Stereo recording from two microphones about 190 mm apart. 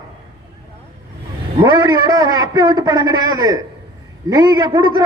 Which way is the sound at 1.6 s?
20° right (ahead or behind).